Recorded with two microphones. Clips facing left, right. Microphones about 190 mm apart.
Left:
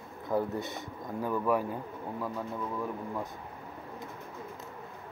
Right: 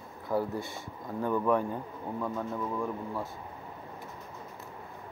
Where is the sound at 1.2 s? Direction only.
5° left (ahead or behind).